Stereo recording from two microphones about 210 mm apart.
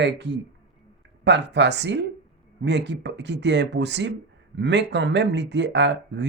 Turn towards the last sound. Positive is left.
turn(degrees=-55)  # may be behind; listen again after turning